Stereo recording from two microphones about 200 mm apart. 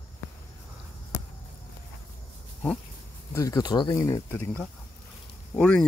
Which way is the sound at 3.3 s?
15° left (ahead or behind).